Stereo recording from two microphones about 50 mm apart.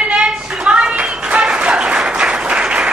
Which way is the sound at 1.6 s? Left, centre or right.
Right.